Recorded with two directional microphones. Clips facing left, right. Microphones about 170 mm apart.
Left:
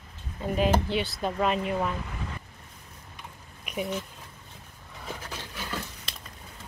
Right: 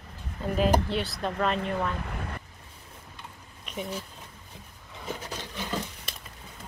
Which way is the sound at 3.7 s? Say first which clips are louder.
Left 3 dB; 10° left (ahead or behind).